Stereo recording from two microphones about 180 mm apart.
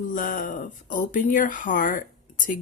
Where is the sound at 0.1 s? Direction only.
50° left (ahead or behind).